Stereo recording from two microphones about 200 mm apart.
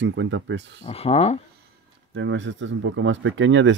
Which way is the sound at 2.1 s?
70° right (ahead or behind).